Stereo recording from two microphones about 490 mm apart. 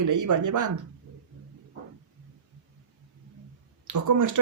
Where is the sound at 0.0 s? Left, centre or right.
Right.